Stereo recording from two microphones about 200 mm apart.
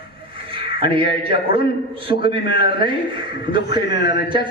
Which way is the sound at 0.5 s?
25° right (ahead or behind).